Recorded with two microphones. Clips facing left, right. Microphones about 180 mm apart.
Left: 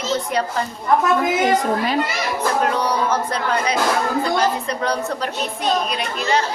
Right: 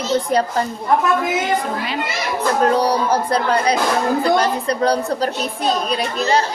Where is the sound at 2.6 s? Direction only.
35° right (ahead or behind).